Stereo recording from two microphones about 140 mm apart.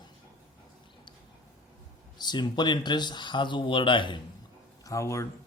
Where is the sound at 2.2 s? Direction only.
30° left (ahead or behind).